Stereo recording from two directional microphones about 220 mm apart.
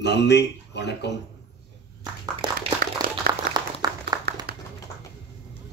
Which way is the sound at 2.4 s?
20° right (ahead or behind).